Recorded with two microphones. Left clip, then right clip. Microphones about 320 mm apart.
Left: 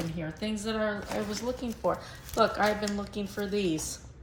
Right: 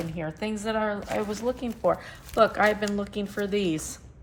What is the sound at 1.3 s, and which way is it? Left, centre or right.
Speech, right.